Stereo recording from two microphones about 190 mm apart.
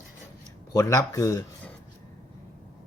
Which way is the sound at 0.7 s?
15° left (ahead or behind).